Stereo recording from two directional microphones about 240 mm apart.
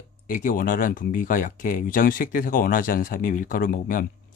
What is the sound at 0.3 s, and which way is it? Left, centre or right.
Speech, left.